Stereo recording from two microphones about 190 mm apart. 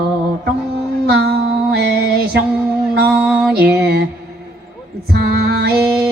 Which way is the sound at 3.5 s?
60° right (ahead or behind).